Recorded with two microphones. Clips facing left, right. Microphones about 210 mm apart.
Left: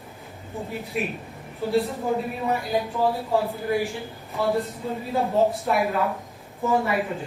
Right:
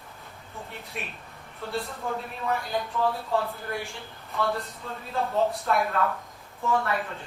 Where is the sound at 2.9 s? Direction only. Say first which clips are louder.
Left 2 dB; 30° left (ahead or behind).